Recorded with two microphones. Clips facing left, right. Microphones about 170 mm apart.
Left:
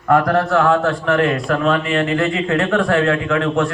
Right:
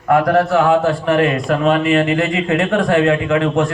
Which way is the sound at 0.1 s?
10° right (ahead or behind).